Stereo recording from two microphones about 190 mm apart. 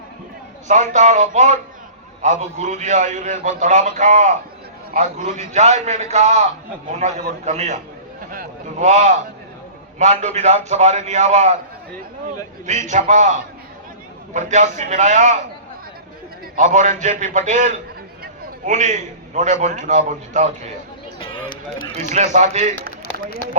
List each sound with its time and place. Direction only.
0.7 s a man's voice: 40° right (ahead or behind)
8.3 s a sound: 45° right (ahead or behind)
10.0 s a man's voice: 35° right (ahead or behind)
12.6 s a man's voice: 40° right (ahead or behind)
16.6 s a man's voice: 40° right (ahead or behind)
21.2 s a sound: 25° left (ahead or behind)
21.9 s a man's voice: 40° right (ahead or behind)